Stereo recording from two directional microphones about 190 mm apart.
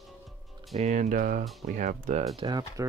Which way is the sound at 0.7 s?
40° right (ahead or behind).